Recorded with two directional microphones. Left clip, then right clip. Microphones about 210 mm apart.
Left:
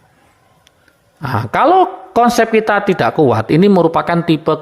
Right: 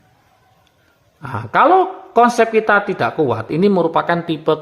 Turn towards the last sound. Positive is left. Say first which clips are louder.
# left 3 dB
turn(degrees=25)  # may be behind; listen again after turning